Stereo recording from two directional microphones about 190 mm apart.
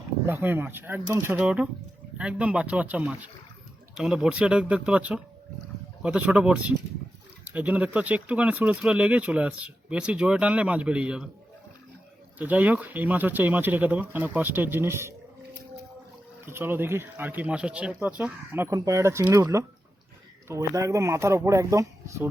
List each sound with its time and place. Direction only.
0.3 s speech: 10° right (ahead or behind)
12.4 s speech: 10° right (ahead or behind)
16.5 s speech: 10° right (ahead or behind)